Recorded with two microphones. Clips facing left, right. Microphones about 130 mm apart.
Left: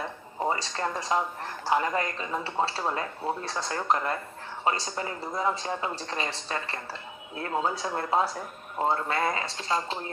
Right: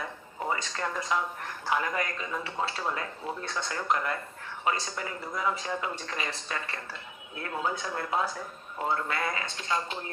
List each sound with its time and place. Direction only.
0.3 s speech: 30° left (ahead or behind)